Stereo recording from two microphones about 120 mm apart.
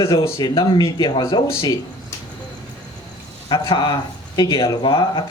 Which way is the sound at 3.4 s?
40° left (ahead or behind).